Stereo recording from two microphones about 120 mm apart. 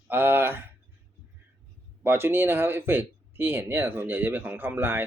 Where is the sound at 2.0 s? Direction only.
20° right (ahead or behind).